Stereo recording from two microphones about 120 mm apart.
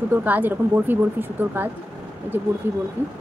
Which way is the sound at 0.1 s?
15° right (ahead or behind).